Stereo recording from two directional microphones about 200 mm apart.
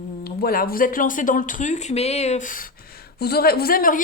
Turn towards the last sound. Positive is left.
turn(degrees=45)  # may be behind; listen again after turning